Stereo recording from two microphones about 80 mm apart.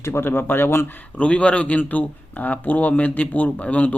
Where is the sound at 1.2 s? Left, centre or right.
Centre.